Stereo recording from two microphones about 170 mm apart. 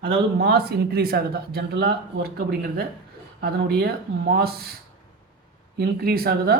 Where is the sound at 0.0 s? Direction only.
70° right (ahead or behind).